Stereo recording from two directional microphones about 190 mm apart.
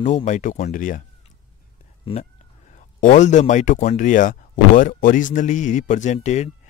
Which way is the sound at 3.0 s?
40° left (ahead or behind).